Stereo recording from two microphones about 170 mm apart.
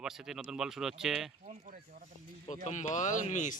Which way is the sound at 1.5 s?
50° right (ahead or behind).